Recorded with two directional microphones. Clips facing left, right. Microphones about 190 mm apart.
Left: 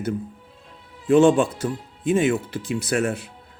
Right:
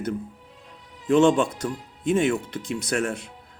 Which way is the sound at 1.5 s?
30° left (ahead or behind).